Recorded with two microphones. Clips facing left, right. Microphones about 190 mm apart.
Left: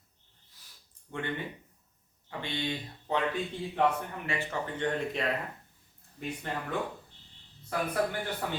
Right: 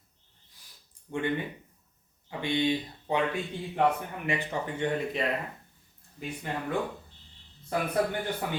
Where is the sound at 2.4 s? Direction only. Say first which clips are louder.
Right 8 dB; 15° right (ahead or behind).